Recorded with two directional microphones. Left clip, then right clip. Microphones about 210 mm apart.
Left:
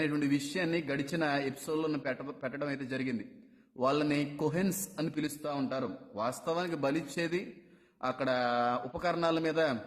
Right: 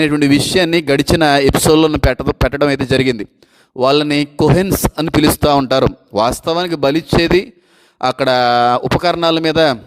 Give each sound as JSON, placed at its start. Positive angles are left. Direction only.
{"t": 0.0, "sound": "a man's voice", "side_deg": -45}